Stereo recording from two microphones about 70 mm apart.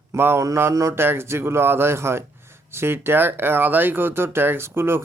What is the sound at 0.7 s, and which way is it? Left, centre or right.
Mantra, right.